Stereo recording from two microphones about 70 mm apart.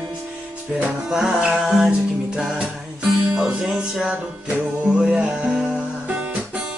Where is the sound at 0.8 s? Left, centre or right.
Centre.